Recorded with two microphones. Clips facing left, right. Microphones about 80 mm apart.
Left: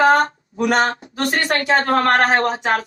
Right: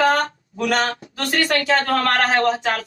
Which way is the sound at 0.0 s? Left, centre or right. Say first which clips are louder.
Left 4 dB; left.